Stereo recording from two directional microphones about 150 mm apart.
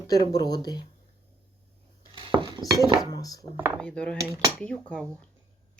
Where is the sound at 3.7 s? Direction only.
5° left (ahead or behind).